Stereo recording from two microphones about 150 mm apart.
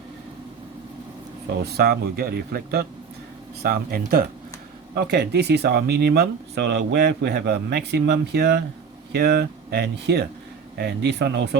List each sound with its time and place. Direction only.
1.6 s speech: 90° right